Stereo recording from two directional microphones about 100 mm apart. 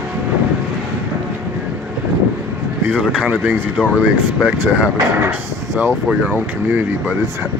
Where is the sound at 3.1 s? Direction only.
15° right (ahead or behind).